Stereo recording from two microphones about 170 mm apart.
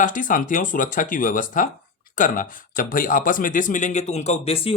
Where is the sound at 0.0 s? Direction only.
50° left (ahead or behind).